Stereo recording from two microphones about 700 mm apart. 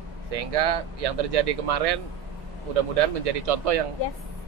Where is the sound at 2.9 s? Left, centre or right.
Right.